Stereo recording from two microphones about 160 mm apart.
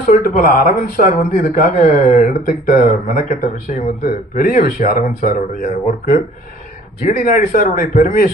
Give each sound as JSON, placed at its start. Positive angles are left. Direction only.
{"t": 0.0, "sound": "speech", "side_deg": 60}